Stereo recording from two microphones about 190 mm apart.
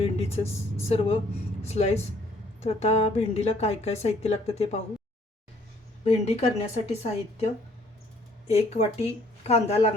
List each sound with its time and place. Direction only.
0.0 s a sound: 30° left (ahead or behind)
0.9 s a woman's voice: 30° left (ahead or behind)
6.1 s a woman's voice: 35° left (ahead or behind)